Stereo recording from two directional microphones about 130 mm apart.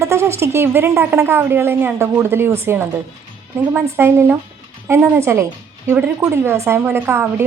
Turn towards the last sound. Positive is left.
turn(degrees=-20)  # may be behind; listen again after turning